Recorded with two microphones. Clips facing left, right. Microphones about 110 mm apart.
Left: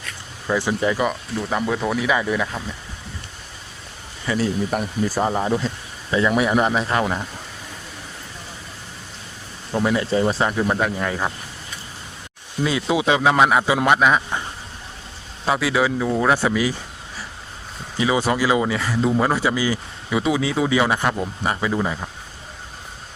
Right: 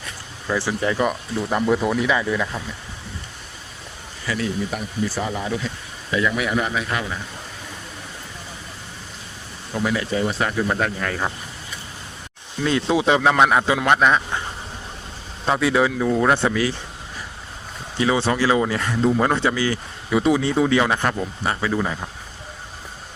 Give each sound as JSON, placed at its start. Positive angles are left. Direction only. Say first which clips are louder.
{"t": 0.4, "sound": "speech", "louder": "left 2 dB", "side_deg": 15}
{"t": 0.9, "sound": "speech", "louder": "right 1 dB", "side_deg": 0}
{"t": 2.0, "sound": "speech", "louder": "even", "side_deg": 10}
{"t": 4.3, "sound": "speech", "louder": "left 3 dB", "side_deg": 25}
{"t": 4.7, "sound": "speech", "louder": "left 3 dB", "side_deg": 50}
{"t": 6.1, "sound": "speech", "louder": "left 3 dB", "side_deg": 30}
{"t": 9.8, "sound": "speech", "louder": "left 3 dB", "side_deg": 25}
{"t": 10.7, "sound": "speech", "louder": "left 2 dB", "side_deg": 10}
{"t": 12.6, "sound": "speech", "louder": "right 1 dB", "side_deg": 5}
{"t": 15.4, "sound": "speech", "louder": "right 1 dB", "side_deg": 5}
{"t": 17.9, "sound": "speech", "louder": "even", "side_deg": 10}
{"t": 18.7, "sound": "speech", "louder": "even", "side_deg": 0}